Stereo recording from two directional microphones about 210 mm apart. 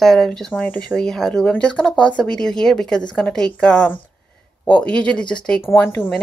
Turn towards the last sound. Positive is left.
turn(degrees=10)  # may be behind; listen again after turning